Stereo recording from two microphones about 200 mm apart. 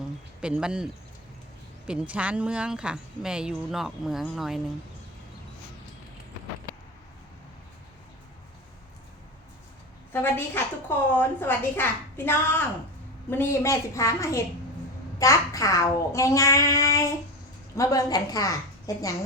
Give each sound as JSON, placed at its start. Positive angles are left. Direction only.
{"t": 0.4, "sound": "a woman's voice", "side_deg": -5}
{"t": 1.9, "sound": "a woman's voice", "side_deg": -5}
{"t": 10.1, "sound": "a woman's voice", "side_deg": 10}